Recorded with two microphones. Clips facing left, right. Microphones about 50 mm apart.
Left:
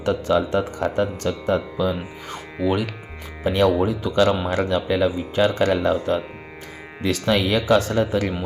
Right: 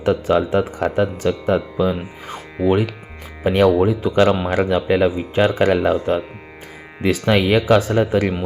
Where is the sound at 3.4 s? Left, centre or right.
Right.